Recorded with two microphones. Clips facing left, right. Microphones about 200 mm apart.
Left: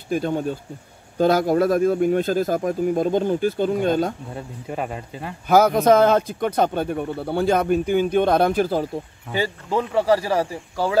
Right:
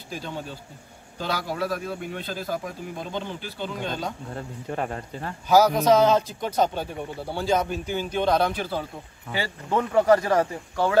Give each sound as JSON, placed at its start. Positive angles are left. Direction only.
{"t": 0.1, "sound": "speech", "side_deg": 55}
{"t": 4.4, "sound": "speech", "side_deg": 10}
{"t": 5.5, "sound": "speech", "side_deg": 55}
{"t": 9.7, "sound": "speech", "side_deg": 5}